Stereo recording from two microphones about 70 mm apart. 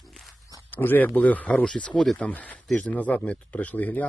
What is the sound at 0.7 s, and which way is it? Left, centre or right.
Speech, left.